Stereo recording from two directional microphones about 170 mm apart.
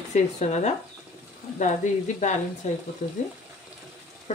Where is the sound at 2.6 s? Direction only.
45° left (ahead or behind).